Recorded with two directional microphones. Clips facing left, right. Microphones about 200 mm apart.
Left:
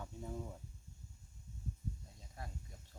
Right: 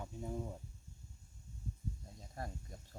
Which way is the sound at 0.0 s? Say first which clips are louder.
Right 3 dB; 15° right (ahead or behind).